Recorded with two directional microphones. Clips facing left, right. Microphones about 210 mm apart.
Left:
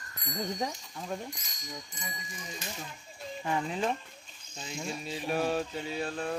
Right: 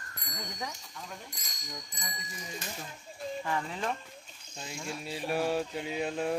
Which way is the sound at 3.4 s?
20° left (ahead or behind).